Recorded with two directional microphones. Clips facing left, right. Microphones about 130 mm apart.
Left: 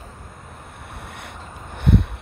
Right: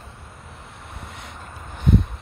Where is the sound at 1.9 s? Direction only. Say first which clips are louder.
Left 1 dB; 65° left (ahead or behind).